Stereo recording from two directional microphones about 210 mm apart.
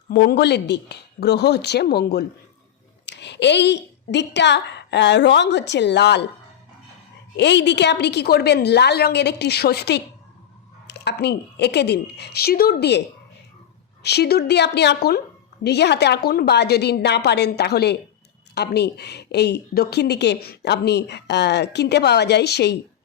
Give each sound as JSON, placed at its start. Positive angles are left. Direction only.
{"t": 0.1, "sound": "a woman's voice", "side_deg": 50}
{"t": 7.3, "sound": "a woman's voice", "side_deg": 55}
{"t": 14.0, "sound": "a woman's voice", "side_deg": 50}